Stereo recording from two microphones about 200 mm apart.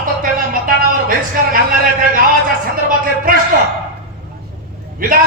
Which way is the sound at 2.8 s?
45° right (ahead or behind).